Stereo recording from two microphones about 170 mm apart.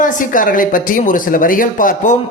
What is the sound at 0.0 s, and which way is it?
Speech, 50° left (ahead or behind).